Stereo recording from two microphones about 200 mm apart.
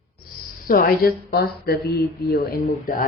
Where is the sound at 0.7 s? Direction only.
45° left (ahead or behind).